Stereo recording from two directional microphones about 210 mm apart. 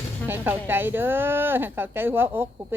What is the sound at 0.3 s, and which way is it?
Speech, 10° right (ahead or behind).